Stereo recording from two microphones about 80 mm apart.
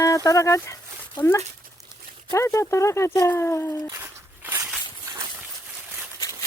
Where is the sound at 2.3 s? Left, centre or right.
Left.